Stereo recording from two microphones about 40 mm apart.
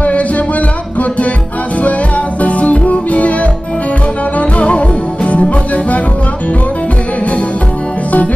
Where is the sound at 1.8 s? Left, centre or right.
Left.